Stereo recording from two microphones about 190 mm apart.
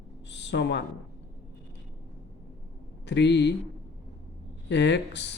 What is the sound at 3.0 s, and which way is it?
Speech, 65° left (ahead or behind).